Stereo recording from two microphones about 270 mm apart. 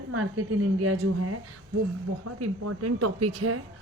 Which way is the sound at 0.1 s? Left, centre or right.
Right.